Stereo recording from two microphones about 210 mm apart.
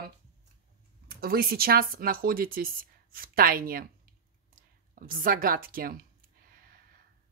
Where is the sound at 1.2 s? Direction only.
45° right (ahead or behind).